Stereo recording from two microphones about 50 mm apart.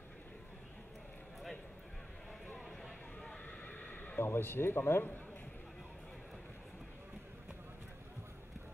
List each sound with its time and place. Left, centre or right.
2.8 s neigh: centre; by 4.2 s left
4.2 s speech: left